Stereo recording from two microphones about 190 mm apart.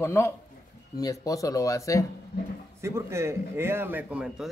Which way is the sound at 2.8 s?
15° right (ahead or behind).